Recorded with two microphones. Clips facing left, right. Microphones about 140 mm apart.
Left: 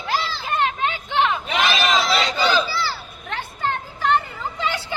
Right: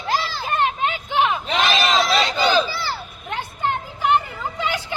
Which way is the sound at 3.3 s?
15° right (ahead or behind).